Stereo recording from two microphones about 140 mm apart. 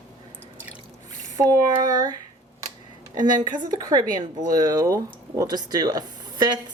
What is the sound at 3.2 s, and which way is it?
A woman's voice, 30° right (ahead or behind).